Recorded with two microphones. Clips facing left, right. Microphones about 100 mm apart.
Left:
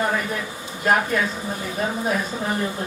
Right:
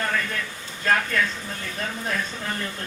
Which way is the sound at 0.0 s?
20° left (ahead or behind).